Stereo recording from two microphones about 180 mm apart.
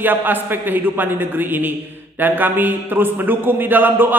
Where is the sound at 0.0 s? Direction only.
10° right (ahead or behind).